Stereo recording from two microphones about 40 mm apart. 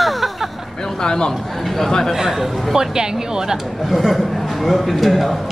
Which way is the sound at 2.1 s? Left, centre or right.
Centre.